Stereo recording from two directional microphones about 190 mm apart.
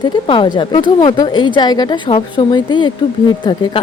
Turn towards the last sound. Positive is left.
turn(degrees=25)  # may be behind; listen again after turning